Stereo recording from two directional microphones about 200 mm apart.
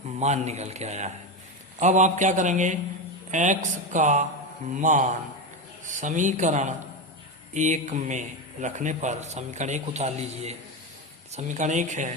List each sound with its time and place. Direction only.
0.2 s a man's voice: 35° right (ahead or behind)